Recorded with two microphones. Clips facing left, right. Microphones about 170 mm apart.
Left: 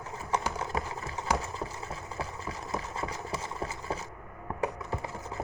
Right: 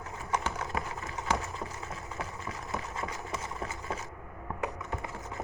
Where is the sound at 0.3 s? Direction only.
30° left (ahead or behind).